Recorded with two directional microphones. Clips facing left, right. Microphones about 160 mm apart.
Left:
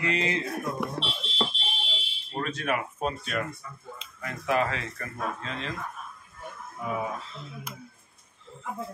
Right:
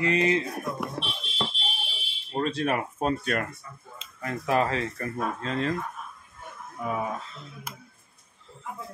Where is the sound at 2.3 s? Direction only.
30° right (ahead or behind).